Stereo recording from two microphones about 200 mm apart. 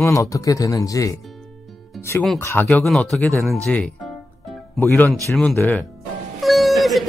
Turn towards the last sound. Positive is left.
turn(degrees=0)  # may be behind; listen again after turning